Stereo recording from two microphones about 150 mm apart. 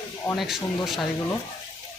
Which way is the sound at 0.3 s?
Centre (ahead or behind).